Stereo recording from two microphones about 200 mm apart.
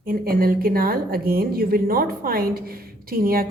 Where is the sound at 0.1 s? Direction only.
45° right (ahead or behind).